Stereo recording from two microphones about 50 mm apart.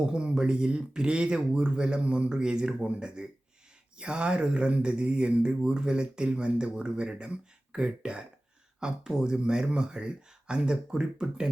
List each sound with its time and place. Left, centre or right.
0.0 s speech: centre